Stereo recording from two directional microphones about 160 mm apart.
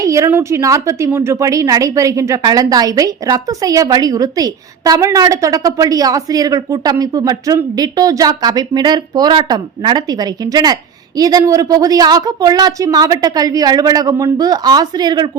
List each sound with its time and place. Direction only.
0.0 s a woman's voice: 20° right (ahead or behind)